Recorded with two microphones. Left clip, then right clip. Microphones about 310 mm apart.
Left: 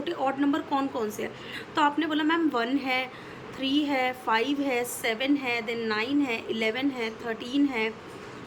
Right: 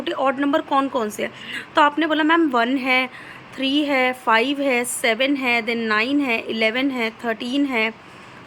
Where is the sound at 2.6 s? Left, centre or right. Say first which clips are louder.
Right 8 dB; centre.